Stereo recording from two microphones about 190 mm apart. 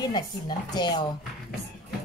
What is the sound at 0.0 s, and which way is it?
Speech, 20° left (ahead or behind).